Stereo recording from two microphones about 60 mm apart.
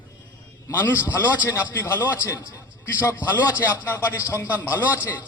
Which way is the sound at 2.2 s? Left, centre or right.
Left.